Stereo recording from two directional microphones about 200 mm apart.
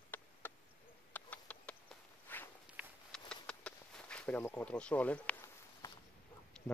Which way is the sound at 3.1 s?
5° left (ahead or behind).